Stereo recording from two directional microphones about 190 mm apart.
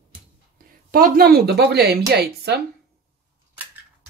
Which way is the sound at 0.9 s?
50° right (ahead or behind).